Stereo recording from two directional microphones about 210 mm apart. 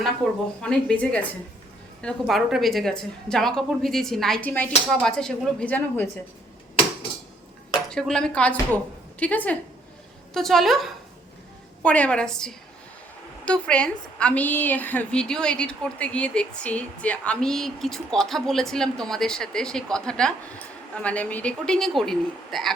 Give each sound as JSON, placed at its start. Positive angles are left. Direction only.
{"t": 0.6, "sound": "a woman's voice", "side_deg": 5}
{"t": 7.9, "sound": "a woman's voice", "side_deg": 5}